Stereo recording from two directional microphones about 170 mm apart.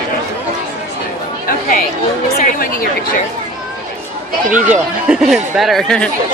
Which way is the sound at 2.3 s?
55° left (ahead or behind).